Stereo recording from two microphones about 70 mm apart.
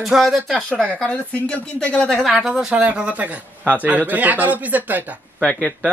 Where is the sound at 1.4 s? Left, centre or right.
Centre.